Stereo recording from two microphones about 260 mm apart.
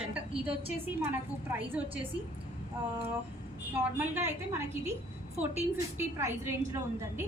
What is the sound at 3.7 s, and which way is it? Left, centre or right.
A woman's voice, centre.